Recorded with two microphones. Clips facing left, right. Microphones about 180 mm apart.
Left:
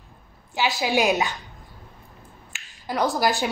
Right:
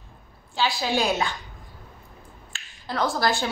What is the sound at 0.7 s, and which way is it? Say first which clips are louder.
Speech: left 4 dB; 15° left (ahead or behind).